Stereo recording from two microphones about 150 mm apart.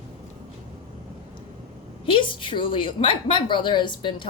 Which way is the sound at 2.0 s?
35° left (ahead or behind).